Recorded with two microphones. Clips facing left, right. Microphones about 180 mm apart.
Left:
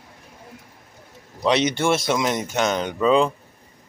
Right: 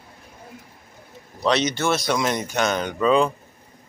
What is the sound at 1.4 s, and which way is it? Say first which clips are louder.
Speech: left 1 dB; 15° left (ahead or behind).